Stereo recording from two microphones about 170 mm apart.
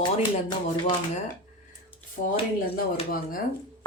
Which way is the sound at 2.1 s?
55° left (ahead or behind).